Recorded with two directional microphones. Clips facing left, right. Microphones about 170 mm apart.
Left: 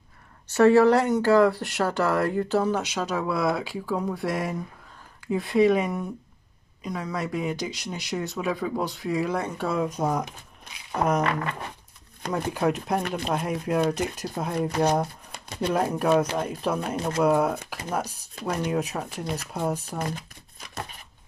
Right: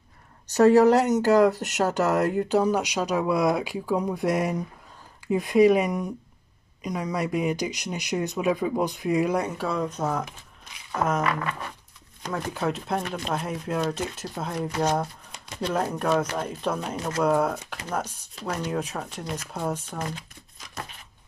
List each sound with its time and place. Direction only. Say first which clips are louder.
0.6 s speech: right 1 dB; 15° right (ahead or behind)
9.6 s speech: left 1 dB; 5° left (ahead or behind)
12.3 s speech: left 3 dB; 15° left (ahead or behind)